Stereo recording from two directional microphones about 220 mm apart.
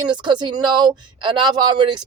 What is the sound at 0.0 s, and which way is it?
Speech, 20° right (ahead or behind).